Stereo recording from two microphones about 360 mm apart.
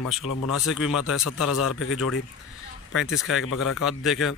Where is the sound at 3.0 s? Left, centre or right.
Centre.